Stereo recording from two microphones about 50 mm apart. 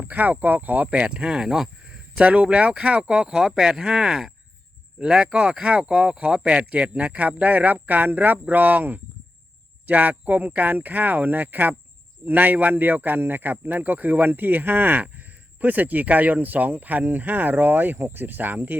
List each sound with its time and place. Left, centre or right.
0.0 s speech: right
0.9 s speech: right